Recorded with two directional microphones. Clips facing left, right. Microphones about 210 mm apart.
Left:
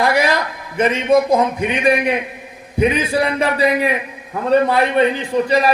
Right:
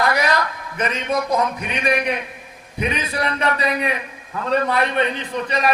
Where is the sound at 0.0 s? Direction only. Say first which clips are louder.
Left 4 dB; 30° left (ahead or behind).